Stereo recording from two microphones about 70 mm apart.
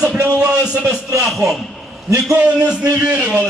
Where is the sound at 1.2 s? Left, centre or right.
Centre.